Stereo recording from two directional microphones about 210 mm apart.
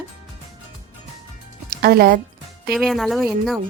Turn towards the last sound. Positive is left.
turn(degrees=0)  # may be behind; listen again after turning